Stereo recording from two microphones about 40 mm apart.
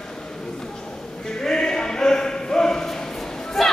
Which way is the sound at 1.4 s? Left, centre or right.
Centre.